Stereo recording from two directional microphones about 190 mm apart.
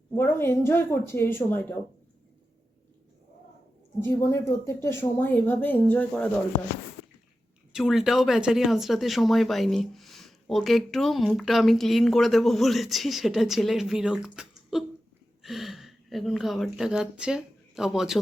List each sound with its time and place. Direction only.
0.2 s speech: 10° left (ahead or behind)
4.0 s speech: 15° left (ahead or behind)
7.7 s speech: centre (ahead or behind)